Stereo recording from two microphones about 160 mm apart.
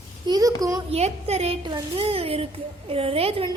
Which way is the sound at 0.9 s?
40° right (ahead or behind).